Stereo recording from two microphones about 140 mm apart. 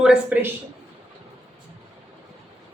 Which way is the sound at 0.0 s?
5° right (ahead or behind).